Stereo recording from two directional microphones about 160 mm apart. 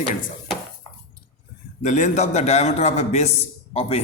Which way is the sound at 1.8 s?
50° left (ahead or behind).